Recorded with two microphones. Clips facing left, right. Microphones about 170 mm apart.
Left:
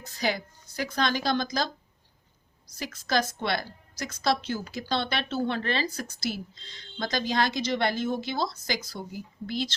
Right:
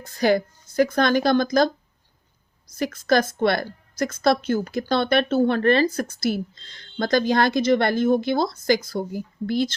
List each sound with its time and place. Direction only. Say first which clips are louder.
0.0 s a woman's voice: right 10 dB; 55° right (ahead or behind)